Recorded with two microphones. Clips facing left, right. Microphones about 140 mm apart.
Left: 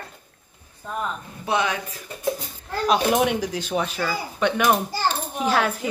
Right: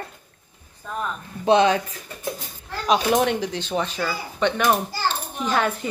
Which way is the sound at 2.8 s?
5° left (ahead or behind).